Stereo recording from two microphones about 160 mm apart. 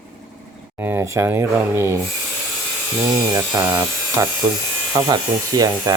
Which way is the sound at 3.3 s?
20° right (ahead or behind).